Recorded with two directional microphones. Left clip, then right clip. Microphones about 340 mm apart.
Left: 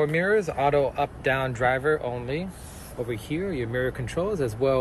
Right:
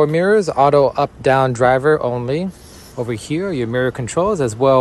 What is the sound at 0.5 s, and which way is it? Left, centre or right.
Speech, right.